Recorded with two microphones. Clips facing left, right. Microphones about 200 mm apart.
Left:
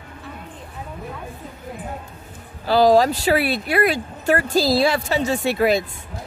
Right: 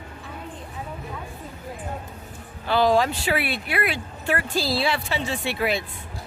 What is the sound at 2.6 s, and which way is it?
Speech, 35° left (ahead or behind).